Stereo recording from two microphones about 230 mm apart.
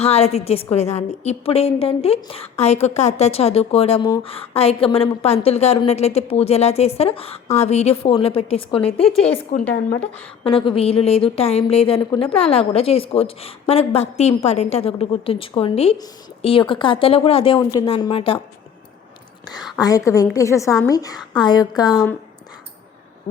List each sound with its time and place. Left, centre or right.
0.0 s a woman's voice: left
9.6 s a woman's voice: centre
10.4 s a woman's voice: left
19.8 s a woman's voice: centre